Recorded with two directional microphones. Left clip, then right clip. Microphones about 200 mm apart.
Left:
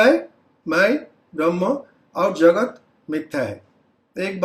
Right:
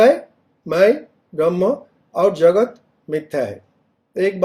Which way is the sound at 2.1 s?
45° right (ahead or behind).